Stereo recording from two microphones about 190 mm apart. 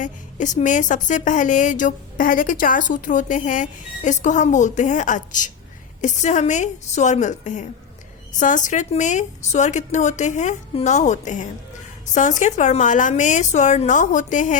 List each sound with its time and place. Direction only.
0.0 s a woman's voice: 40° left (ahead or behind)